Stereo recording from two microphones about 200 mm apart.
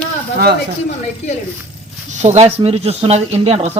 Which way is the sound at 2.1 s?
35° right (ahead or behind).